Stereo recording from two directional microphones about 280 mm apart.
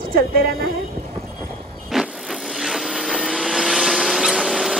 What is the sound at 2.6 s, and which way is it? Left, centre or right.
Vehicle, centre.